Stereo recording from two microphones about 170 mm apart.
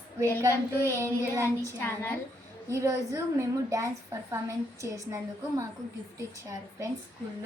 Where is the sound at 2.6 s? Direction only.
20° right (ahead or behind).